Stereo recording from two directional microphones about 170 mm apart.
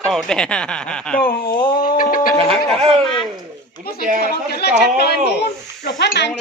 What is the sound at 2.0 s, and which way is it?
Speech, 55° left (ahead or behind).